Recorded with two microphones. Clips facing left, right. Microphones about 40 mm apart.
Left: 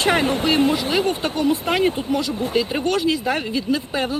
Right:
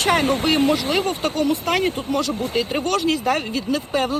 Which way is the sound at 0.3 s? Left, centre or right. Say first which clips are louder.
Right 1 dB; right.